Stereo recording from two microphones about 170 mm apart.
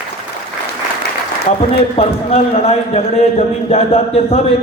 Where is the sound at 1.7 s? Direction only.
35° left (ahead or behind).